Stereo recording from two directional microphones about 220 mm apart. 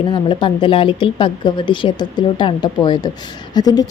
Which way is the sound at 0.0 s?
20° left (ahead or behind).